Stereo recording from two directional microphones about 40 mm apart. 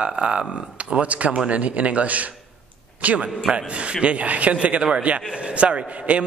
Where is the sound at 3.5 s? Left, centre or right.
Right.